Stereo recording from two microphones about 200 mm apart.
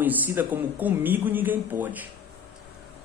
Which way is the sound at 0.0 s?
10° right (ahead or behind).